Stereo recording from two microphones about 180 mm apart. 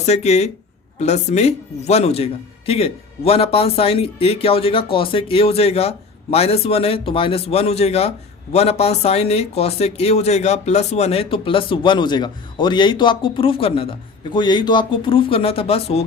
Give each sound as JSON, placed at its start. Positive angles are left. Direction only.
{"t": 0.0, "sound": "a man's voice", "side_deg": 40}